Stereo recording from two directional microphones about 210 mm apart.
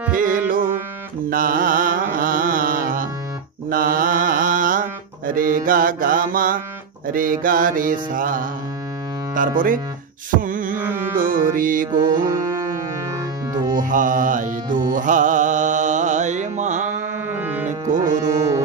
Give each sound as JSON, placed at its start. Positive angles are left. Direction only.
{"t": 0.1, "sound": "music", "side_deg": -40}
{"t": 7.1, "sound": "mantra", "side_deg": -40}
{"t": 10.3, "sound": "a sound", "side_deg": -40}
{"t": 11.1, "sound": "mantra", "side_deg": -40}
{"t": 11.9, "sound": "music", "side_deg": -20}
{"t": 13.5, "sound": "music", "side_deg": -20}
{"t": 13.7, "sound": "mantra", "side_deg": -40}
{"t": 17.3, "sound": "music", "side_deg": -10}
{"t": 17.6, "sound": "music", "side_deg": -35}
{"t": 18.0, "sound": "music", "side_deg": -20}